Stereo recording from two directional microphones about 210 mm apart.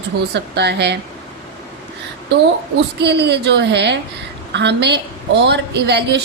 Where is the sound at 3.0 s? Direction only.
50° right (ahead or behind).